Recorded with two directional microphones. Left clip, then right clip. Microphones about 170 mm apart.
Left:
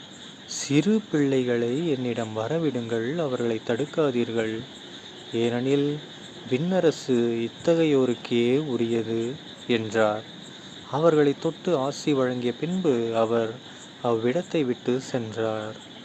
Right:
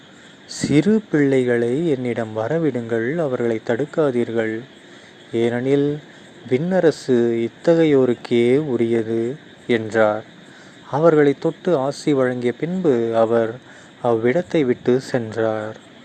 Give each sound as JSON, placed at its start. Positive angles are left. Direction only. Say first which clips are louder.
{"t": 0.5, "sound": "speech", "louder": "right 6 dB", "side_deg": -25}